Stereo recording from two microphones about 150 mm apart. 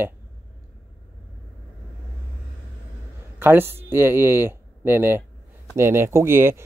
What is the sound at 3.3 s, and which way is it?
A man's voice, 15° right (ahead or behind).